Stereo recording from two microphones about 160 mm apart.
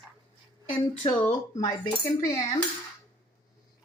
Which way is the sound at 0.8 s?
25° left (ahead or behind).